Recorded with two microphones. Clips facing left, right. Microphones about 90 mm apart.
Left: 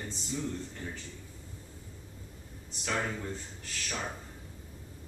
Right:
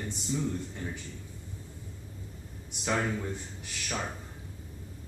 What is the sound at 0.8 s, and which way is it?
Speech, 10° right (ahead or behind).